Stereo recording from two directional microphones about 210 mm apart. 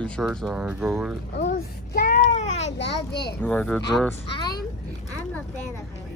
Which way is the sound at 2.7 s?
55° left (ahead or behind).